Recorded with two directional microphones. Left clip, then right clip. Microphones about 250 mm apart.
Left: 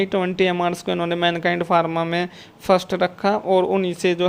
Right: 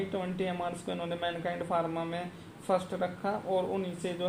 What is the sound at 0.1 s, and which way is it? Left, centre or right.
Speech, left.